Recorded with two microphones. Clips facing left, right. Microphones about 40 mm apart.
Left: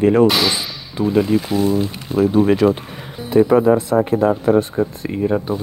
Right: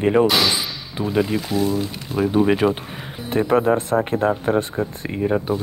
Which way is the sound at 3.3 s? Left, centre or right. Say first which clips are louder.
Left 5 dB; right.